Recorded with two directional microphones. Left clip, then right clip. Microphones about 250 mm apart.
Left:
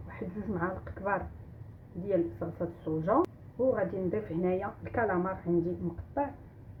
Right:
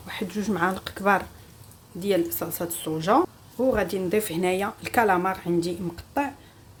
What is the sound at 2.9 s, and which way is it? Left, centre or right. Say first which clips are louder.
Speech: right 4 dB; right.